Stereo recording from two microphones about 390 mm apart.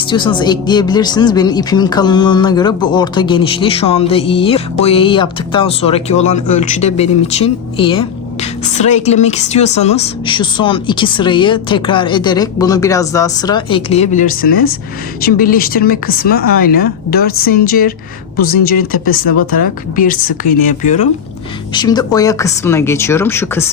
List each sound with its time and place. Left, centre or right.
0.1 s speech: centre